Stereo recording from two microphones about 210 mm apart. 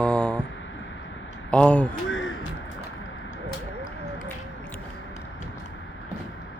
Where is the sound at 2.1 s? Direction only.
65° left (ahead or behind).